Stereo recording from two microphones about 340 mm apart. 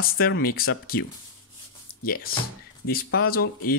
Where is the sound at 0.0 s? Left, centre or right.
Left.